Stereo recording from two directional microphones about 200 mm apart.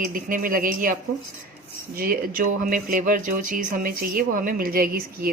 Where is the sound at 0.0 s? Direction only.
45° right (ahead or behind).